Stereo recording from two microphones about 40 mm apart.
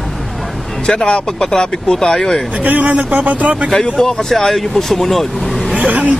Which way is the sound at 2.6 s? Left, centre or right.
Right.